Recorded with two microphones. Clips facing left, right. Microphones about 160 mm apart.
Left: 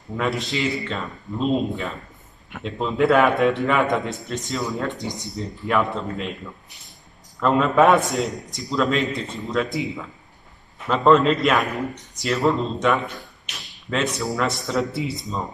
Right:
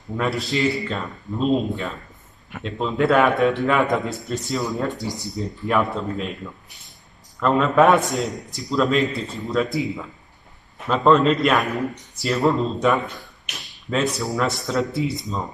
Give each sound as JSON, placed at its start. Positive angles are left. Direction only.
{"t": 0.2, "sound": "a man's voice", "side_deg": 0}
{"t": 4.9, "sound": "speech", "side_deg": 20}
{"t": 5.3, "sound": "a man's voice", "side_deg": 0}
{"t": 7.3, "sound": "a man's voice", "side_deg": 0}